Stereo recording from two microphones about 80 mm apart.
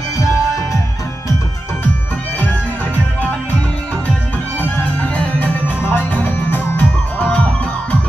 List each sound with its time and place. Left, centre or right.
4.6 s music: centre